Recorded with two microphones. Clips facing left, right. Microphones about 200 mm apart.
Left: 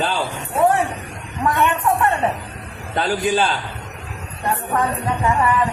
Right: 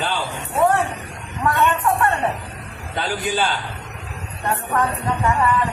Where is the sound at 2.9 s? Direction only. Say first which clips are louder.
Left 4 dB; 40° left (ahead or behind).